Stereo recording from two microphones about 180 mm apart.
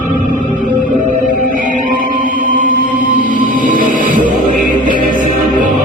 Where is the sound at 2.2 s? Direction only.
50° right (ahead or behind).